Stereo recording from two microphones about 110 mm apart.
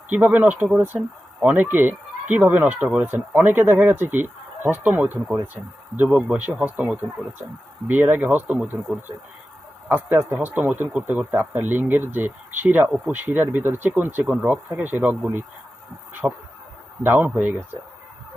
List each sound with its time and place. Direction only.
0.1 s speech: 15° right (ahead or behind)
9.9 s speech: 20° right (ahead or behind)